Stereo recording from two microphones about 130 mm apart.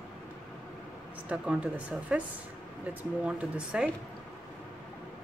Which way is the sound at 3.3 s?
5° right (ahead or behind).